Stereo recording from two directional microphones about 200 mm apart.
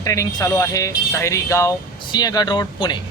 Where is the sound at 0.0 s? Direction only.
15° left (ahead or behind).